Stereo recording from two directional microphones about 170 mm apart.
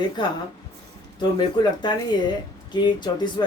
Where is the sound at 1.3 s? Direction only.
25° left (ahead or behind).